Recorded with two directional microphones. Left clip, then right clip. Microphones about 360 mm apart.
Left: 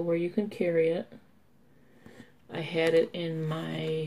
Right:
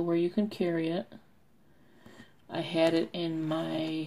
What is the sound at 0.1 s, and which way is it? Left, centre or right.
Speech, right.